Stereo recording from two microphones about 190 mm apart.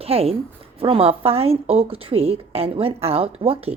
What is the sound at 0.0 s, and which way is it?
A woman's voice, 30° right (ahead or behind).